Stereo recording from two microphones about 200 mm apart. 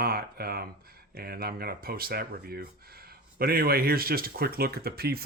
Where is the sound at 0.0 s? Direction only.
50° right (ahead or behind).